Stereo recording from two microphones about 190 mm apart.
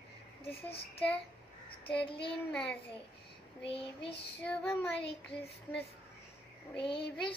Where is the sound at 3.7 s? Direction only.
30° left (ahead or behind).